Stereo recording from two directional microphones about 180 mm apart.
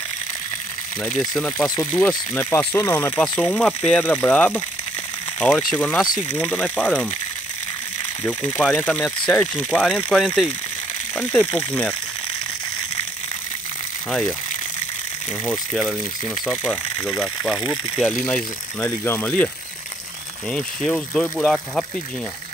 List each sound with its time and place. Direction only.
1.0 s speech: centre (ahead or behind)
1.8 s speech: 15° left (ahead or behind)
8.3 s speech: 10° left (ahead or behind)
15.7 s speech: centre (ahead or behind)
16.9 s speech: 20° left (ahead or behind)
17.5 s speech: centre (ahead or behind)